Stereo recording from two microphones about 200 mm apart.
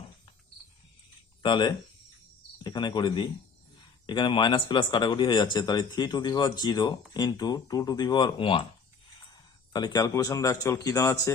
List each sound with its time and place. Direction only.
1.4 s speech: 25° left (ahead or behind)